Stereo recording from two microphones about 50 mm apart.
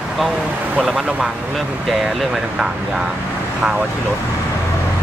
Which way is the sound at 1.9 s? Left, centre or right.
Centre.